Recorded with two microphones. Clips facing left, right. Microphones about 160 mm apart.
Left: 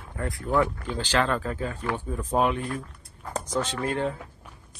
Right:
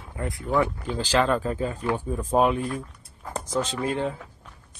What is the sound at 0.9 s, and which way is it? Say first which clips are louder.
Speech: right 3 dB; 10° right (ahead or behind).